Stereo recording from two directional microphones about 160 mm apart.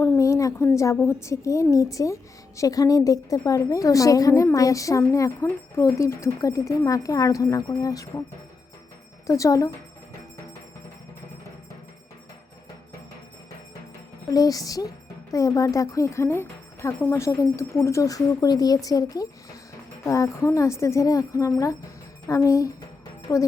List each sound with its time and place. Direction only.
0.0 s a woman's voice: 20° left (ahead or behind)
9.2 s a woman's voice: 20° left (ahead or behind)
14.3 s a woman's voice: 20° left (ahead or behind)